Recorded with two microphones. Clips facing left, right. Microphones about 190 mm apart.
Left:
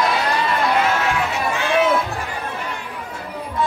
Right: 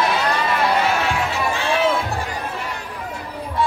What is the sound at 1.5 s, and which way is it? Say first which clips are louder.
Run: left 4 dB; 30° right (ahead or behind).